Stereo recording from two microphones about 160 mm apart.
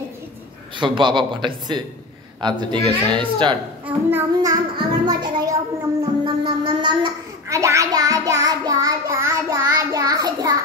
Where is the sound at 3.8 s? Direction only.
15° right (ahead or behind).